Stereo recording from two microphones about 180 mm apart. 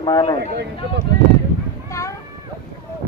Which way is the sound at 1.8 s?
15° left (ahead or behind).